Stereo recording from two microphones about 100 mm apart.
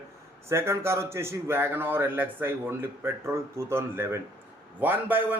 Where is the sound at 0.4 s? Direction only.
25° right (ahead or behind).